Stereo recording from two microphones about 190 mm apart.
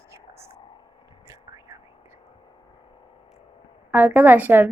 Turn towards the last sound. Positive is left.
turn(degrees=-10)  # may be behind; listen again after turning